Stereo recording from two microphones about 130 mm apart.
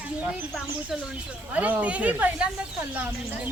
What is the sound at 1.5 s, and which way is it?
Speech, 10° right (ahead or behind).